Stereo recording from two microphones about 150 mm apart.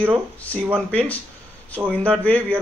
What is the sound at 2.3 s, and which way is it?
Speech, 10° left (ahead or behind).